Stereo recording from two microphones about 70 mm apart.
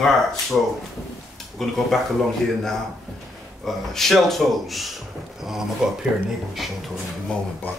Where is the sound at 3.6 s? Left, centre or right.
Centre.